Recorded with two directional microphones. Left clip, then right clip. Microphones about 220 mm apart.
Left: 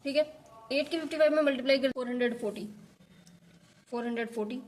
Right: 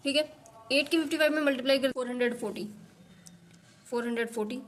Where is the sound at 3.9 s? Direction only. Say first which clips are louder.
Right 3 dB; 25° right (ahead or behind).